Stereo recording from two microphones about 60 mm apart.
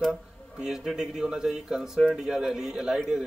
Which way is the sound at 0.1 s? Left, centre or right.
Centre.